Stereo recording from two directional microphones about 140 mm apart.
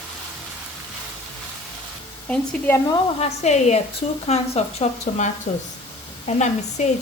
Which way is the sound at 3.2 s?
55° left (ahead or behind).